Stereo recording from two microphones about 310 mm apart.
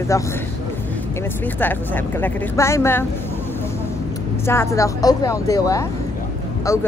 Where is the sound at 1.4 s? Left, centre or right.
Centre.